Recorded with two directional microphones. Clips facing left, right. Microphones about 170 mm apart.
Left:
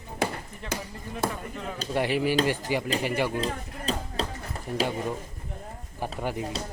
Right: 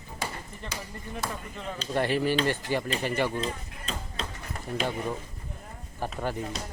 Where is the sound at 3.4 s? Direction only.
35° left (ahead or behind).